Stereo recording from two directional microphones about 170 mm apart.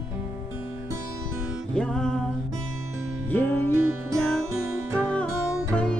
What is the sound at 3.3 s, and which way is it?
Music, 10° left (ahead or behind).